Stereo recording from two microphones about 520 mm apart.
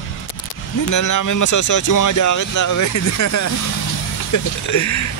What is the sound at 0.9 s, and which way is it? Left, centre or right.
Speech, left.